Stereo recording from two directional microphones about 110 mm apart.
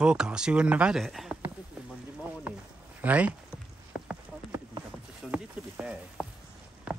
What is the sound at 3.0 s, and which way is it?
Speech, 15° right (ahead or behind).